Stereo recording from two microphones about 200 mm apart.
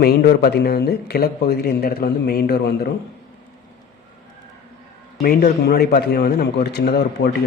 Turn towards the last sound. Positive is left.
turn(degrees=55)  # may be behind; listen again after turning